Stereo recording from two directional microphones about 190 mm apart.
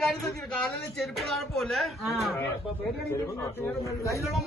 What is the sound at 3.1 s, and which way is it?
Speech, 15° left (ahead or behind).